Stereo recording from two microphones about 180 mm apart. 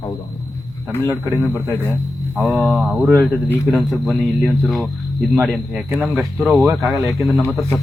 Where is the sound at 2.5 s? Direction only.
Centre (ahead or behind).